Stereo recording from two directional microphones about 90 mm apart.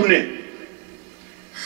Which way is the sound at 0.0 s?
20° right (ahead or behind).